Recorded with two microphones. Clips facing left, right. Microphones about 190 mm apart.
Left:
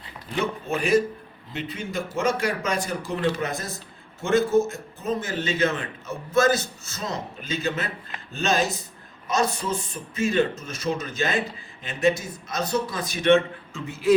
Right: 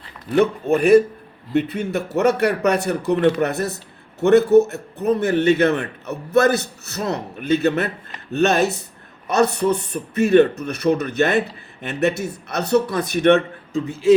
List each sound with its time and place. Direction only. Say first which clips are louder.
0.3 s speech: right 10 dB; 60° right (ahead or behind)
13.7 s speech: right 5 dB; 25° right (ahead or behind)